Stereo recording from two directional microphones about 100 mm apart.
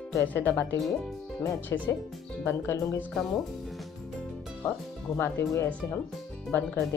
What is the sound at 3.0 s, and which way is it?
Speech, 5° left (ahead or behind).